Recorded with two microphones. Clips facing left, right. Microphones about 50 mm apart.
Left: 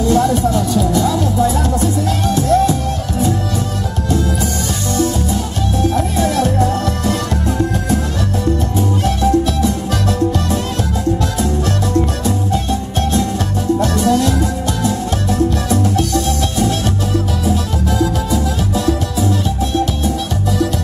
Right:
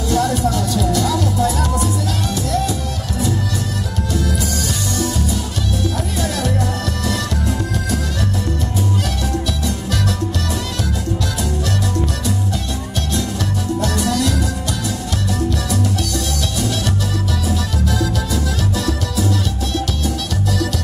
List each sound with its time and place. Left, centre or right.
0.1 s music: left
2.2 s music: left
9.6 s music: left
13.7 s music: left